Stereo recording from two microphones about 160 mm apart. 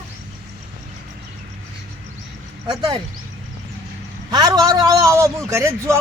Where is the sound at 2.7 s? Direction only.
30° right (ahead or behind).